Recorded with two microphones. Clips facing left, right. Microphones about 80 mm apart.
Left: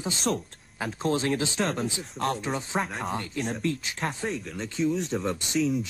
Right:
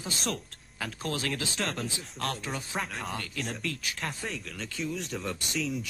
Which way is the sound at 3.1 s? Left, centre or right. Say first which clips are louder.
Left 5 dB; left.